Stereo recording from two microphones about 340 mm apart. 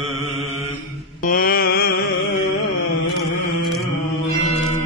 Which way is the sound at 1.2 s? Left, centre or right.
Left.